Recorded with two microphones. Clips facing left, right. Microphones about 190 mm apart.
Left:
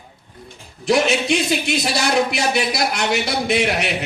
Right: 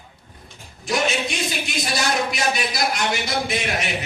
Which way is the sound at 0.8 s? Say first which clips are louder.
Left 6 dB; 65° left (ahead or behind).